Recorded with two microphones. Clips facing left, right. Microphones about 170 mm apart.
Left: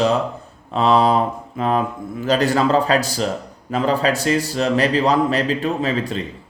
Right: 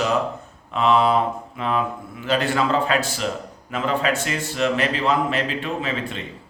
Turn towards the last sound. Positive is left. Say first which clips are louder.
# left 5 dB
turn(degrees=40)  # may be behind; listen again after turning